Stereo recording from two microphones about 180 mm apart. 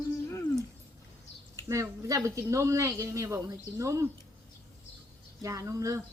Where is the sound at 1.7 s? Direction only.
15° right (ahead or behind).